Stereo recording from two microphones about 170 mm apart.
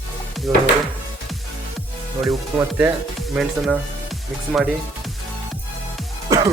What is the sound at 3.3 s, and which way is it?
Speech, centre (ahead or behind).